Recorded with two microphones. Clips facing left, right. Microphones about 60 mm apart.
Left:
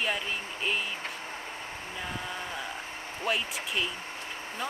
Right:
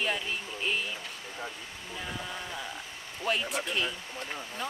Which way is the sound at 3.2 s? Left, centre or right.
Centre.